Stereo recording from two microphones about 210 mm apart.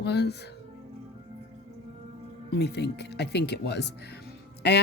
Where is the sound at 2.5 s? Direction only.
50° left (ahead or behind).